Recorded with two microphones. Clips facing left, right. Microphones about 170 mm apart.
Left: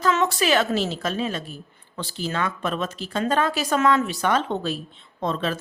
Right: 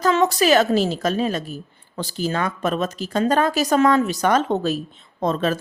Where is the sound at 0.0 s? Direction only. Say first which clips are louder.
Right 4 dB; 40° right (ahead or behind).